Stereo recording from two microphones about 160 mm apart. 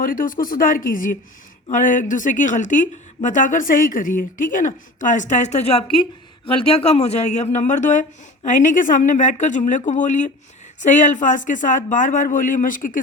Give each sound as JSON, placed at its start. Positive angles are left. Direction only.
{"t": 0.0, "sound": "a woman's voice", "side_deg": 60}